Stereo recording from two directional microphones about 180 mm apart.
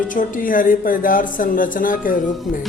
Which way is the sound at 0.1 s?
45° left (ahead or behind).